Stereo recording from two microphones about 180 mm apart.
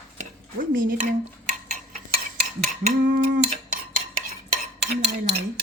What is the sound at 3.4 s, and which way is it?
Cutlery, 50° right (ahead or behind).